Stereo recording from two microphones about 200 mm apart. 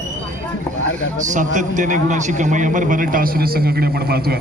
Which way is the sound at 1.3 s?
40° right (ahead or behind).